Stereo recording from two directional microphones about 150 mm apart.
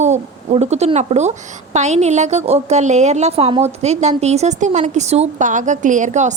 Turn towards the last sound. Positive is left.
turn(degrees=-55)  # may be behind; listen again after turning